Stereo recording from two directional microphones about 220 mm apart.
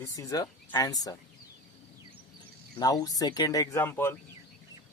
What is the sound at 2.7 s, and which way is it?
Speech, 15° left (ahead or behind).